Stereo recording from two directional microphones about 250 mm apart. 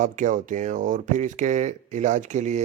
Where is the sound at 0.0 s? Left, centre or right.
Right.